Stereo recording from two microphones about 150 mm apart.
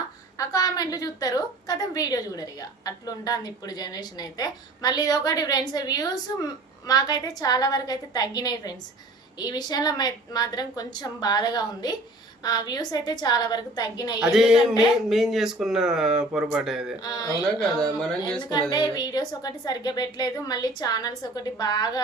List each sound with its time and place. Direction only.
0.3 s a woman's voice: 25° left (ahead or behind)
14.2 s a man's voice: 5° right (ahead or behind)
17.0 s a woman's voice: 25° left (ahead or behind)
17.6 s a man's voice: 5° left (ahead or behind)
18.7 s a woman's voice: 25° left (ahead or behind)